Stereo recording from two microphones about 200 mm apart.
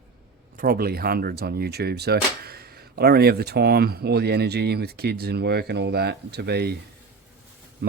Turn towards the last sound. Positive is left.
turn(degrees=-60)  # may be behind; listen again after turning